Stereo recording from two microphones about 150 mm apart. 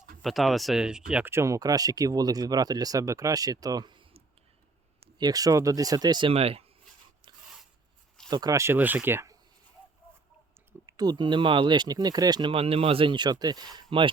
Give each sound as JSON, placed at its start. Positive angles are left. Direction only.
{"t": 0.2, "sound": "speech", "side_deg": 0}
{"t": 8.3, "sound": "speech", "side_deg": -25}
{"t": 10.7, "sound": "speech", "side_deg": -25}